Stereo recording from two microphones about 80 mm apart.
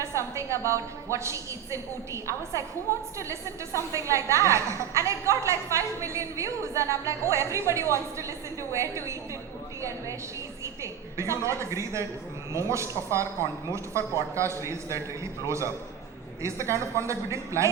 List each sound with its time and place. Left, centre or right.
0.0 s a woman's voice: right
3.9 s a woman's voice: right
11.2 s a woman's voice: right